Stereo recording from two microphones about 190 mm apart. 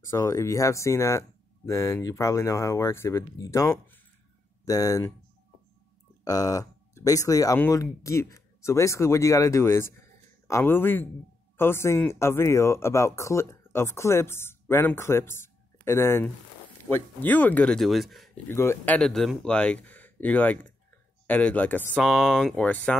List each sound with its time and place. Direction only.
0.1 s speech: 15° left (ahead or behind)
6.2 s speech: 20° left (ahead or behind); by 18.3 s centre (ahead or behind)
18.5 s speech: 15° left (ahead or behind)
18.9 s speech: centre (ahead or behind)